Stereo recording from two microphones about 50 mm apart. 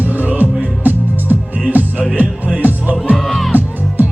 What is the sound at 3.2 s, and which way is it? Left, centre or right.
Music, centre.